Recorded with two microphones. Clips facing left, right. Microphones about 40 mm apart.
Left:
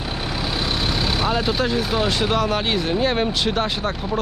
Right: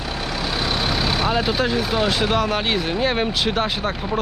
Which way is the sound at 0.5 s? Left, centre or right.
Centre.